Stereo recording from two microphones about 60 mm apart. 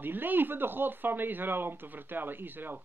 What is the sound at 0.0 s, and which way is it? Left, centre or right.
Speech, right.